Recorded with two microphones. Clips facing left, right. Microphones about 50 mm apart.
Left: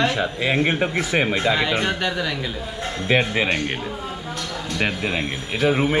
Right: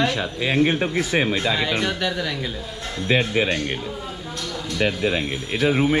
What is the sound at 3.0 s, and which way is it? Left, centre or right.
Speech, left.